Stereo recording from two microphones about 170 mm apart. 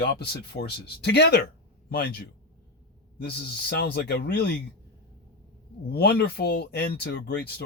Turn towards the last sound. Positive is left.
turn(degrees=85)